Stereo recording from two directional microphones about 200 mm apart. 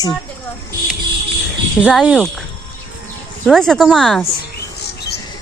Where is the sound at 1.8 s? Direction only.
Centre (ahead or behind).